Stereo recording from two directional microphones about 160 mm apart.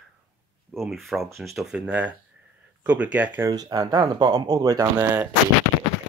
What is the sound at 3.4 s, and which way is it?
Speech, 25° right (ahead or behind).